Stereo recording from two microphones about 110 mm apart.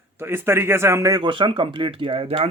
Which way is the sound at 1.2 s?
50° right (ahead or behind).